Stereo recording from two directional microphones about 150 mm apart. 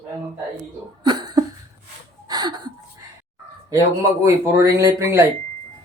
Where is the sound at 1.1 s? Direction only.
25° right (ahead or behind).